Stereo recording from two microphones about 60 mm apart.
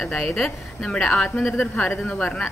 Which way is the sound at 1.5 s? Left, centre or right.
Left.